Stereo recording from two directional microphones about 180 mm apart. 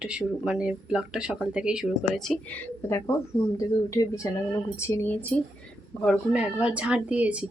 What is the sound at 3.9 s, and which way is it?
Speech, 20° left (ahead or behind).